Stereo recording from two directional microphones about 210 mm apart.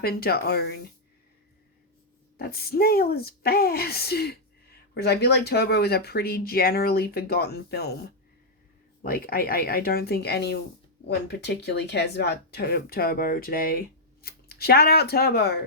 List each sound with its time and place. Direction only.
0.0 s speech: 45° left (ahead or behind)
2.4 s speech: 45° left (ahead or behind)
9.0 s speech: 45° left (ahead or behind)